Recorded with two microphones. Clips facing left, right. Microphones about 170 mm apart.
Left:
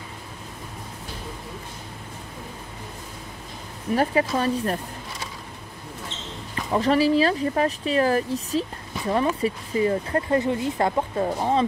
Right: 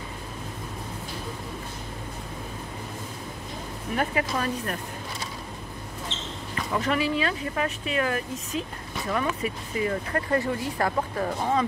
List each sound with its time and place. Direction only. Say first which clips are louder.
3.9 s speech: left 5 dB; 30° left (ahead or behind)
6.7 s speech: left 7 dB; 35° left (ahead or behind)